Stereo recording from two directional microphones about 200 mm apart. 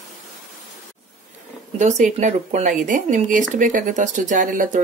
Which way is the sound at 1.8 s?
35° right (ahead or behind).